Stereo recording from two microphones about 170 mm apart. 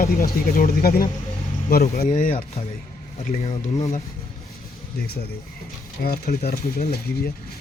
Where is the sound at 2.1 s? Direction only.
45° left (ahead or behind).